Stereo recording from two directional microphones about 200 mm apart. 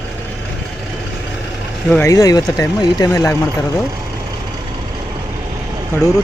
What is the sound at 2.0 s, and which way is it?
Speech, 15° left (ahead or behind).